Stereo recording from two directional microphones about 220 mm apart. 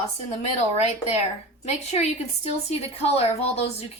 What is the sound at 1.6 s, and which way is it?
A woman's voice, 30° left (ahead or behind).